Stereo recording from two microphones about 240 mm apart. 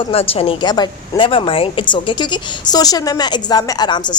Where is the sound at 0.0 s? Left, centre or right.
Left.